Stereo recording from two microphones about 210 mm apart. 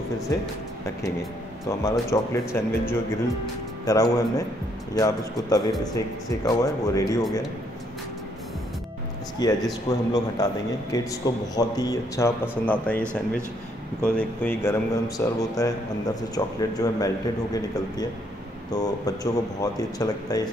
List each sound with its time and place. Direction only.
0.3 s speech: 15° left (ahead or behind)
1.7 s speech: 15° left (ahead or behind)
9.4 s speech: 20° left (ahead or behind)
12.6 s speech: 5° left (ahead or behind)
14.0 s speech: 5° left (ahead or behind)
18.7 s speech: 20° left (ahead or behind)